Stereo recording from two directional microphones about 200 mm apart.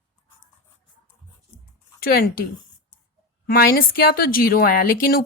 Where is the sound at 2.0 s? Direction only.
50° left (ahead or behind).